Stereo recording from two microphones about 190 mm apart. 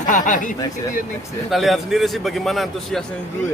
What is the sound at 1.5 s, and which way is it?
A man's voice, centre (ahead or behind).